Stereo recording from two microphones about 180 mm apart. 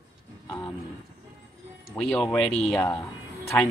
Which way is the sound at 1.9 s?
5° left (ahead or behind).